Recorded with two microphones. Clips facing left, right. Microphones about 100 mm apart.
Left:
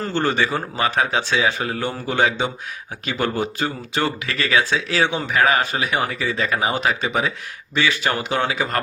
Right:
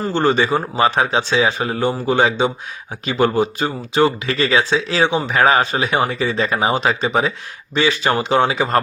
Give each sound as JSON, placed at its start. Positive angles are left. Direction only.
{"t": 0.0, "sound": "speech", "side_deg": -20}
{"t": 5.3, "sound": "speech", "side_deg": -30}